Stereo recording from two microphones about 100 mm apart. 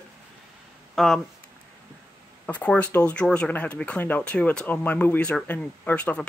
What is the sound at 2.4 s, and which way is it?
Speech, 15° left (ahead or behind).